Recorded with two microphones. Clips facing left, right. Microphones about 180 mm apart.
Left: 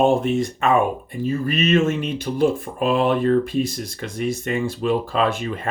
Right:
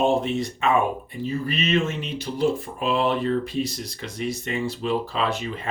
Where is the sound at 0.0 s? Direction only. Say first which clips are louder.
Left 4 dB; 50° left (ahead or behind).